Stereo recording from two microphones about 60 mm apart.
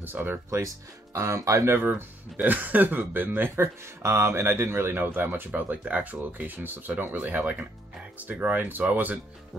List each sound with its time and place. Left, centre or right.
0.0 s speech: right
1.1 s speech: right
1.7 s speech: right
3.6 s speech: right
5.5 s speech: right